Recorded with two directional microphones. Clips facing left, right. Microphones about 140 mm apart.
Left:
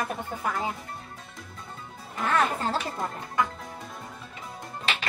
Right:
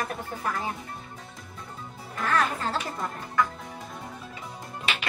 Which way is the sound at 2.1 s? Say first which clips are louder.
Left 1 dB; 25° left (ahead or behind).